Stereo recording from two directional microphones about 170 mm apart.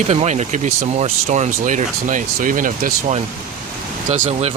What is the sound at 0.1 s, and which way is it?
Speech, 40° right (ahead or behind).